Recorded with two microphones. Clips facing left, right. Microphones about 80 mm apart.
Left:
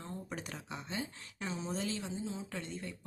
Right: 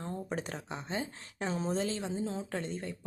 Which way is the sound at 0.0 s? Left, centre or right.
Right.